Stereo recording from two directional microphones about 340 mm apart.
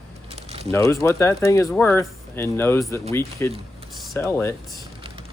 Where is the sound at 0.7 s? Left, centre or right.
Centre.